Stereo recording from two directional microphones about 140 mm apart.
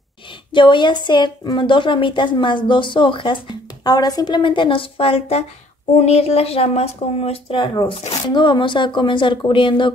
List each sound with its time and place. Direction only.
0.5 s a woman's voice: 35° left (ahead or behind)